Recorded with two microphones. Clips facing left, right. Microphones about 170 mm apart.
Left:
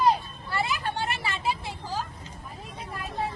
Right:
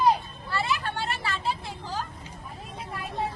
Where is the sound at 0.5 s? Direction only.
15° left (ahead or behind).